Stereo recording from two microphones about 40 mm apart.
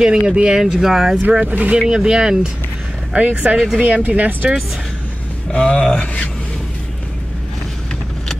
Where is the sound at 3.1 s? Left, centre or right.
Right.